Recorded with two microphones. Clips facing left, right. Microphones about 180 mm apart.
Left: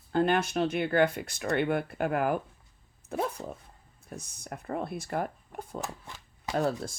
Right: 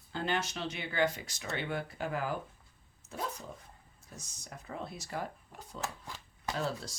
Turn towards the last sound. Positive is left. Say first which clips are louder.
# left 7 dB
turn(degrees=55)  # may be behind; listen again after turning